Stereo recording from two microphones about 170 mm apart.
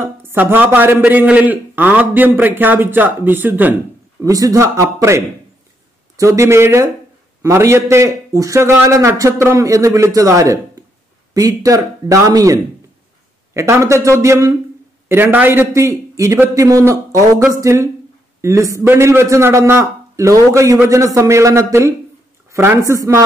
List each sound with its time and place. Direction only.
0.0 s a man's voice: 15° right (ahead or behind)